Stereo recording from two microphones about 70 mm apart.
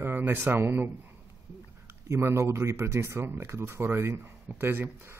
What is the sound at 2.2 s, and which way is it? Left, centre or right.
Speech, right.